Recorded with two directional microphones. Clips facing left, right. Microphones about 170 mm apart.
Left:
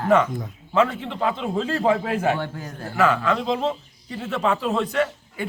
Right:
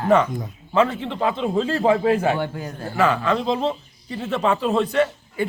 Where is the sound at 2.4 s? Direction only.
15° right (ahead or behind).